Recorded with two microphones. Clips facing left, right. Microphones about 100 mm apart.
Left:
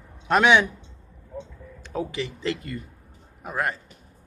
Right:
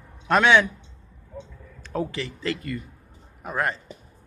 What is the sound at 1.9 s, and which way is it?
Speech, 15° left (ahead or behind).